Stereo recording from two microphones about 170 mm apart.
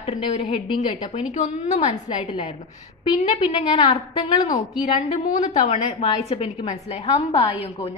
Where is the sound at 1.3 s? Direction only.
40° left (ahead or behind).